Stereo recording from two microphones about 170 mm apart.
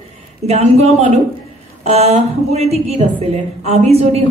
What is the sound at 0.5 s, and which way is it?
A woman's voice, 40° right (ahead or behind).